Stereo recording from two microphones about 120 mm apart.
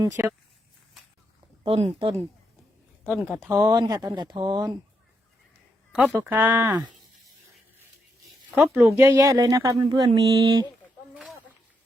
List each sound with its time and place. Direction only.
0.0 s speech: 25° right (ahead or behind)
1.6 s speech: 50° right (ahead or behind)
3.1 s speech: 5° right (ahead or behind)
3.4 s speech: 25° right (ahead or behind)
5.9 s speech: 10° right (ahead or behind)
8.4 s speech: 10° right (ahead or behind)
8.8 s speech: 25° right (ahead or behind)